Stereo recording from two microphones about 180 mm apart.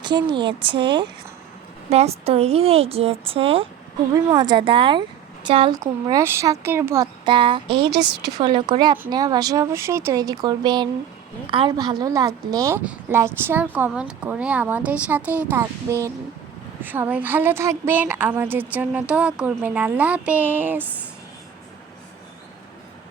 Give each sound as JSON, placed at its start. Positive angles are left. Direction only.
{"t": 0.0, "sound": "a woman's voice", "side_deg": -25}
{"t": 5.8, "sound": "speech", "side_deg": -15}
{"t": 7.9, "sound": "speech", "side_deg": -65}
{"t": 8.4, "sound": "a woman's voice", "side_deg": -25}